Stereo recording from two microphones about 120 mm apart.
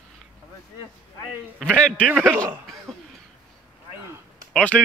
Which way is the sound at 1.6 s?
5° left (ahead or behind).